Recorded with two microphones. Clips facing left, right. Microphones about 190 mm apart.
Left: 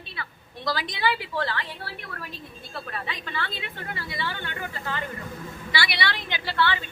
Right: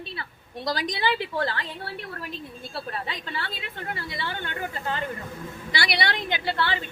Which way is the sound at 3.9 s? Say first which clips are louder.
Right 1 dB; 45° right (ahead or behind).